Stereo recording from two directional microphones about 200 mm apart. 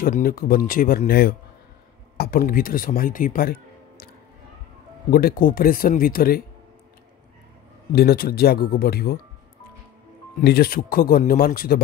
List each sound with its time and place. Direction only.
0.0 s speech: 45° left (ahead or behind)
5.1 s speech: 45° left (ahead or behind)
7.9 s speech: 50° left (ahead or behind)
10.4 s speech: 50° left (ahead or behind)